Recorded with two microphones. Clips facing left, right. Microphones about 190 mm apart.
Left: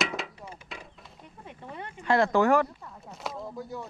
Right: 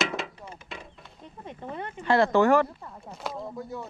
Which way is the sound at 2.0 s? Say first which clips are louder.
Right 2 dB; centre (ahead or behind).